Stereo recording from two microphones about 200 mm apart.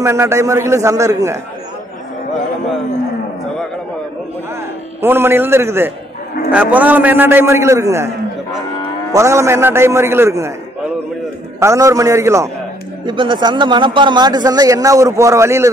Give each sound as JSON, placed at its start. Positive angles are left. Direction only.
{"t": 0.0, "sound": "a man's voice", "side_deg": -15}
{"t": 5.0, "sound": "a man's voice", "side_deg": -10}
{"t": 9.1, "sound": "a man's voice", "side_deg": -15}
{"t": 11.6, "sound": "a man's voice", "side_deg": -15}